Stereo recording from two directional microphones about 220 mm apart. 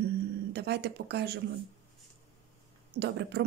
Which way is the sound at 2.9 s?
50° right (ahead or behind).